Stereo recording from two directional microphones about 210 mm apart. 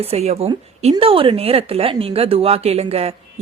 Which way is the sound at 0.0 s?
30° right (ahead or behind).